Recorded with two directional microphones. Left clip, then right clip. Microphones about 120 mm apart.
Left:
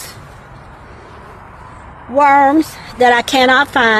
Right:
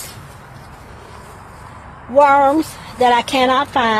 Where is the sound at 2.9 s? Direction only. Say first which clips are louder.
Left 3 dB; 90° left.